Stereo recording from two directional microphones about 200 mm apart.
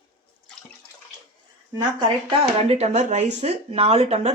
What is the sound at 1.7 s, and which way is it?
Speech, 25° right (ahead or behind).